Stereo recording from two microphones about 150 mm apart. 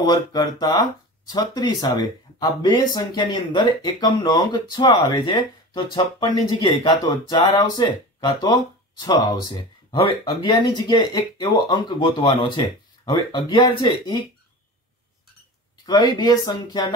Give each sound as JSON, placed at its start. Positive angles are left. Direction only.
{"t": 0.0, "sound": "speech", "side_deg": 30}
{"t": 15.8, "sound": "speech", "side_deg": 30}